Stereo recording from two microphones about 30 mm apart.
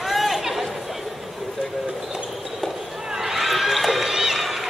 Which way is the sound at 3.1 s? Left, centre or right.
Centre.